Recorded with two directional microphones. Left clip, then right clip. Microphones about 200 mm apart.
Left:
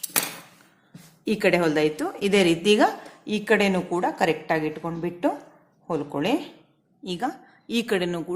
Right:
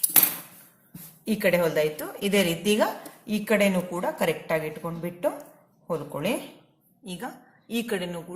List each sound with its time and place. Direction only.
1.2 s a woman's voice: 50° left (ahead or behind)